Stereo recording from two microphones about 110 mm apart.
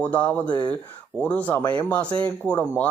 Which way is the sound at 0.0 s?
10° left (ahead or behind).